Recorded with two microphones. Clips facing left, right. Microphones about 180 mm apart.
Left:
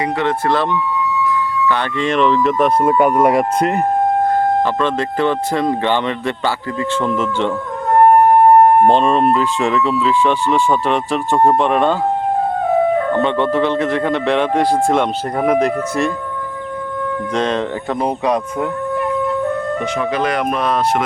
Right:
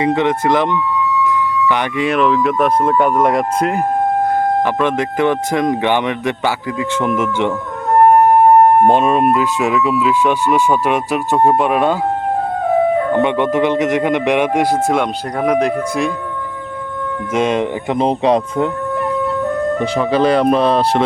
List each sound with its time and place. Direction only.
0.0 s speech: 20° right (ahead or behind); by 3.8 s centre (ahead or behind)
4.6 s speech: 15° right (ahead or behind)
8.8 s speech: 5° right (ahead or behind)
13.1 s speech: 15° right (ahead or behind); by 15.6 s 5° left (ahead or behind)
17.3 s speech: 10° right (ahead or behind)
19.8 s speech: 30° right (ahead or behind)